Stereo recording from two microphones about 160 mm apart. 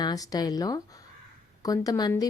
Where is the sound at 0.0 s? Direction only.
25° left (ahead or behind).